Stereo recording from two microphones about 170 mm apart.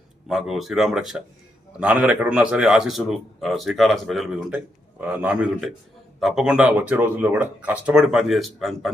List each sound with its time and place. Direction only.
0.3 s a man's voice: centre (ahead or behind)